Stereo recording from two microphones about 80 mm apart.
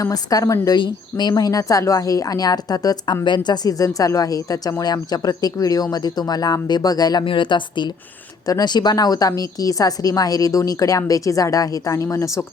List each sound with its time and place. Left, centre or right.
0.0 s a woman's voice: left
0.8 s a woman's voice: left
3.2 s a woman's voice: left
8.4 s a woman's voice: left